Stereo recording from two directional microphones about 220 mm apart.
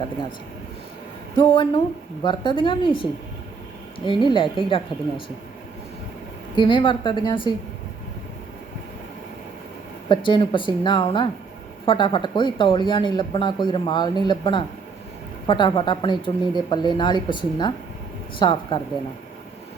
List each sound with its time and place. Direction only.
1.4 s speech: 20° left (ahead or behind)
6.6 s speech: 20° left (ahead or behind)
10.1 s speech: 20° left (ahead or behind)